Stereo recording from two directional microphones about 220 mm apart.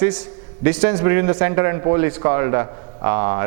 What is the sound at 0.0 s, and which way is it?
A man's voice, 10° right (ahead or behind).